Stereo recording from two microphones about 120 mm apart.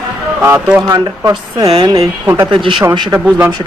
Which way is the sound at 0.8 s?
30° right (ahead or behind).